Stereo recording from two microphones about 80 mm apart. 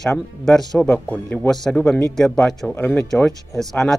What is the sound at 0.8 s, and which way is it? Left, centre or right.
Speech, centre.